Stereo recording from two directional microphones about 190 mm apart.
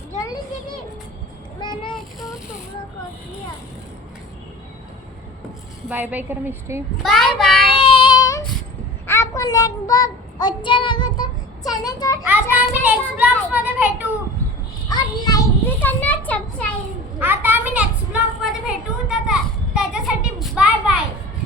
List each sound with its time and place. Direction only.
5.9 s a child's voice: 10° right (ahead or behind)
6.9 s a child's voice: centre (ahead or behind)
7.7 s child singing: 30° left (ahead or behind)
11.7 s a child's voice: 20° left (ahead or behind)
12.2 s a child's voice: 10° right (ahead or behind)
14.8 s a sound: 20° left (ahead or behind)
17.2 s a sound: 10° right (ahead or behind)